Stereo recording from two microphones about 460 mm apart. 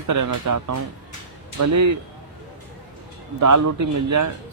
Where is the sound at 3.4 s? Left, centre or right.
Right.